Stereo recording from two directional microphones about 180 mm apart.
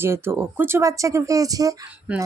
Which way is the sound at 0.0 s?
15° right (ahead or behind).